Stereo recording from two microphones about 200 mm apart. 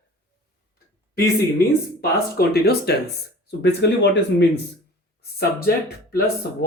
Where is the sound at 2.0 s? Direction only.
50° left (ahead or behind).